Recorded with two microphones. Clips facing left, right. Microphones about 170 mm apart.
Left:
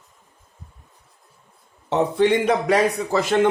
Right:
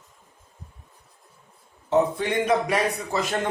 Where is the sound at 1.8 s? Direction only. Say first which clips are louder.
Left 4 dB; 80° left.